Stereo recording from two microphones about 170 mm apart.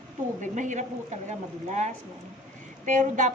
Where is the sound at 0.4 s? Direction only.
45° right (ahead or behind).